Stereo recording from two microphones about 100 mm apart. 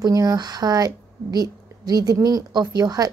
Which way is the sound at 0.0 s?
40° right (ahead or behind).